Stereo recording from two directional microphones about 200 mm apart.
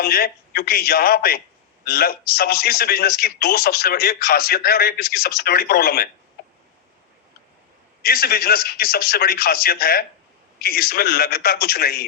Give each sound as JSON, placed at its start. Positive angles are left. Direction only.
{"t": 0.0, "sound": "a man's voice", "side_deg": 50}
{"t": 8.0, "sound": "a man's voice", "side_deg": 50}